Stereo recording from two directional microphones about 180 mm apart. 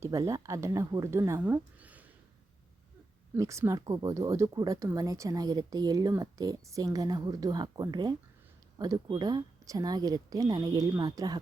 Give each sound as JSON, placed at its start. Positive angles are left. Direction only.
{"t": 0.0, "sound": "speech", "side_deg": -15}
{"t": 3.3, "sound": "speech", "side_deg": -15}